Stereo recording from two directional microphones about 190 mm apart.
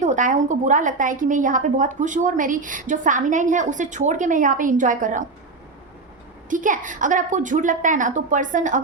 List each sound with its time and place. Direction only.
0.0 s a woman's voice: 40° right (ahead or behind)
6.5 s a woman's voice: 45° right (ahead or behind)